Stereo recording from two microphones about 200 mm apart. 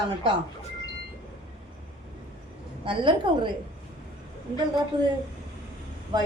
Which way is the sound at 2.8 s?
25° right (ahead or behind).